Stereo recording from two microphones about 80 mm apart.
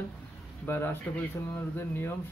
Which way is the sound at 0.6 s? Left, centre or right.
Left.